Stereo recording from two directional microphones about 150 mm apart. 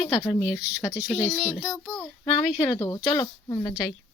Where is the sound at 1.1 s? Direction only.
Centre (ahead or behind).